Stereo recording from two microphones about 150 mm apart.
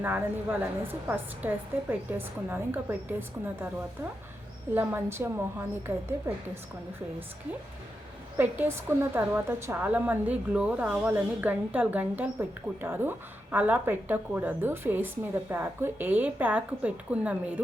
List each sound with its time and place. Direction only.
0.6 s a woman's voice: 15° right (ahead or behind)
4.7 s a woman's voice: 15° right (ahead or behind)
8.4 s a woman's voice: 15° right (ahead or behind)